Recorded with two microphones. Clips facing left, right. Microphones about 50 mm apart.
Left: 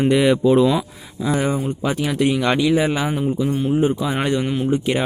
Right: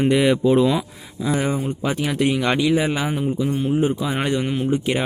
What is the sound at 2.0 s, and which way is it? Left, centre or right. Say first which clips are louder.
Speech: left 1 dB; right.